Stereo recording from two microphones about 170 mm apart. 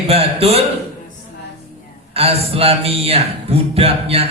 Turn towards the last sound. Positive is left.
turn(degrees=-35)  # may be behind; listen again after turning